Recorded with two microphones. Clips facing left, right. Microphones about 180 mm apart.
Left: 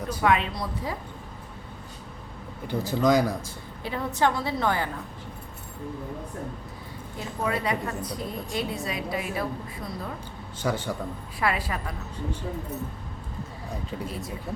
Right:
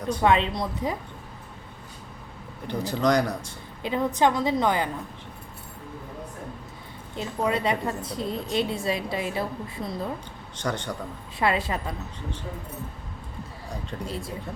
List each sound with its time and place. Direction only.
0.2 s a woman's voice: 25° right (ahead or behind)
2.6 s speech: 5° left (ahead or behind)
3.8 s a woman's voice: 20° right (ahead or behind)
7.2 s a woman's voice: 25° right (ahead or behind)
10.6 s speech: 5° left (ahead or behind)
11.3 s a woman's voice: 25° right (ahead or behind)
14.1 s a woman's voice: 30° right (ahead or behind)